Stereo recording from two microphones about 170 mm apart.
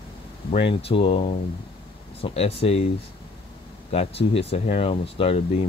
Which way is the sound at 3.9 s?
35° left (ahead or behind).